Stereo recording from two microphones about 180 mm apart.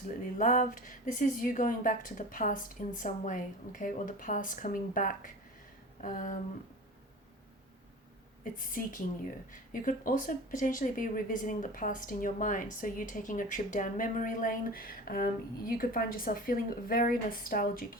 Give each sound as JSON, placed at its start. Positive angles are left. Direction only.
{"t": 0.3, "sound": "speech", "side_deg": 45}
{"t": 8.4, "sound": "speech", "side_deg": 50}